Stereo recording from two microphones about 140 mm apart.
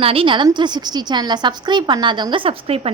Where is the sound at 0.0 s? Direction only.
40° right (ahead or behind).